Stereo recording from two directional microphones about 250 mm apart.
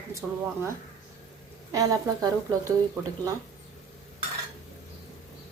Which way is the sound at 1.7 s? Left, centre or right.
Centre.